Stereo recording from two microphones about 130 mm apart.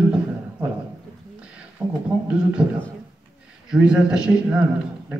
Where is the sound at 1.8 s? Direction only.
35° right (ahead or behind).